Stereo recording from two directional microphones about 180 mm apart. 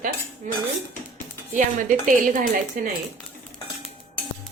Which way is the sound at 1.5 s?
45° right (ahead or behind).